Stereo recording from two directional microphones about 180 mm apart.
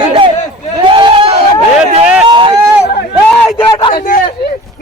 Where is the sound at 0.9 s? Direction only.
30° right (ahead or behind).